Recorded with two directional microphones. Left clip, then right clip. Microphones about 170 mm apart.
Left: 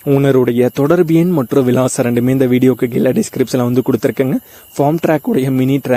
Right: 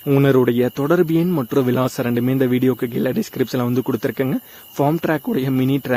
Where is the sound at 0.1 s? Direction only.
30° left (ahead or behind).